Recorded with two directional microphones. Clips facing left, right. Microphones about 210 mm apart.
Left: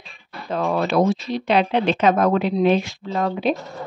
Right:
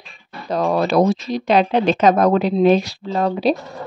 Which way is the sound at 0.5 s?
40° right (ahead or behind).